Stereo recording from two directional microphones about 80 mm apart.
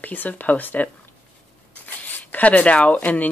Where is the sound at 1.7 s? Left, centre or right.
Left.